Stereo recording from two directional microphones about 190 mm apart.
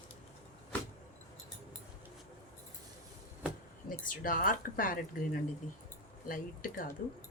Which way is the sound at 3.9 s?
45° left (ahead or behind).